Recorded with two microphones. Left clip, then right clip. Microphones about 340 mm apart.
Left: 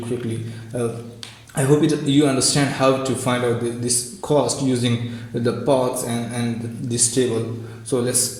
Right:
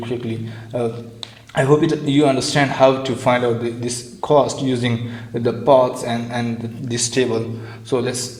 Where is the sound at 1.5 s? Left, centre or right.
Right.